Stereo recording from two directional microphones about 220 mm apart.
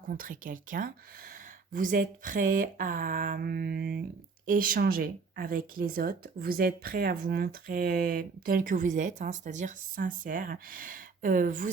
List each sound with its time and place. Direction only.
0.1 s speech: 40° right (ahead or behind)